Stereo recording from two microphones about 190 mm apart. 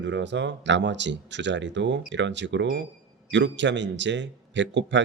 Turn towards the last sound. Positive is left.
turn(degrees=-70)  # may be behind; listen again after turning